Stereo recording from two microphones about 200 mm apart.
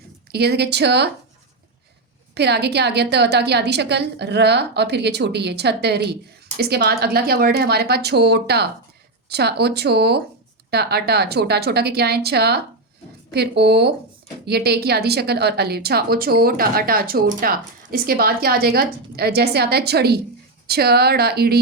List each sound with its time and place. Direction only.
0.3 s a woman's voice: 55° right (ahead or behind)
2.3 s a woman's voice: 55° right (ahead or behind)